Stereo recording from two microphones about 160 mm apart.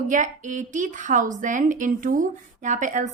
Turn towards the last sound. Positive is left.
turn(degrees=-50)  # may be behind; listen again after turning